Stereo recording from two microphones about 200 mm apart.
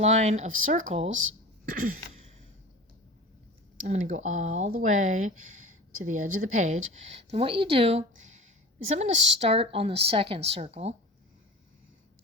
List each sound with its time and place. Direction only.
0.0 s speech: 35° right (ahead or behind)
1.1 s speech: 75° right (ahead or behind)
3.8 s speech: 35° right (ahead or behind)
9.1 s speech: 65° right (ahead or behind)
9.4 s speech: 30° right (ahead or behind)